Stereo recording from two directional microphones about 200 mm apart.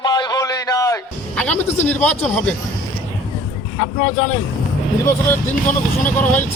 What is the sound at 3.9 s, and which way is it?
Speech, 90° left.